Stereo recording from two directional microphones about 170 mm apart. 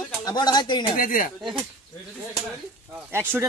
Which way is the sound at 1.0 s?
55° left (ahead or behind).